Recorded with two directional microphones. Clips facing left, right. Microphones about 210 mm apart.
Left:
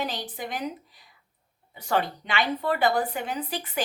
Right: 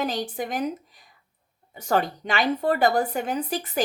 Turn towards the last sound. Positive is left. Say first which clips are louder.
# right 4 dB
turn(degrees=-45)  # may be behind; listen again after turning